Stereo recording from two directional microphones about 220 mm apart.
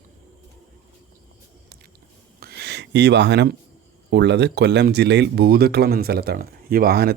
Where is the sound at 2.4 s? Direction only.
45° right (ahead or behind).